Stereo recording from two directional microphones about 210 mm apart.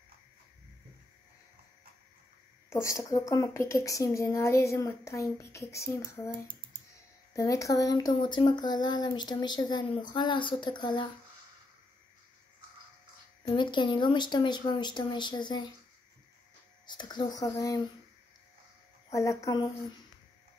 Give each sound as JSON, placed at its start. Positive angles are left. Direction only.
{"t": 2.7, "sound": "a woman's voice", "side_deg": 15}
{"t": 13.6, "sound": "speech", "side_deg": 20}
{"t": 16.8, "sound": "speech", "side_deg": 20}
{"t": 19.1, "sound": "a woman's voice", "side_deg": 15}